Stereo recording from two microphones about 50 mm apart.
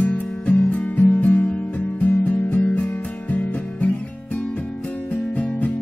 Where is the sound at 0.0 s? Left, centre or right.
Left.